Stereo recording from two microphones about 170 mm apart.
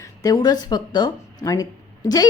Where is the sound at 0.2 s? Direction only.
20° left (ahead or behind).